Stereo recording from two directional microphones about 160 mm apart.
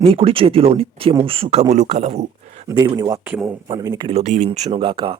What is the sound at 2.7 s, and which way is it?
Speech, 25° right (ahead or behind).